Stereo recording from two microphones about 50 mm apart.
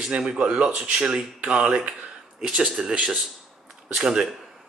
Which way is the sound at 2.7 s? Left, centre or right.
Centre.